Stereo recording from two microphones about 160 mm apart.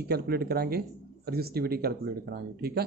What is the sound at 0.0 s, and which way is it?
Speech, 80° right.